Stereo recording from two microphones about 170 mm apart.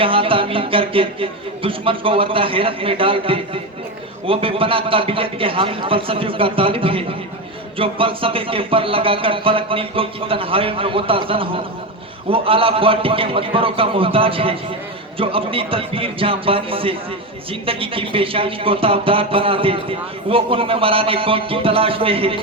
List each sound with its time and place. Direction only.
0.0 s speech: 30° right (ahead or behind)